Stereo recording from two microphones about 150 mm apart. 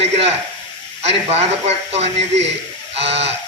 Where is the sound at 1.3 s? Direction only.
45° right (ahead or behind).